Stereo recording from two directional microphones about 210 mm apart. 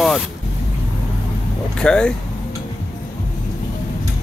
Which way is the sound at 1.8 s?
5° left (ahead or behind).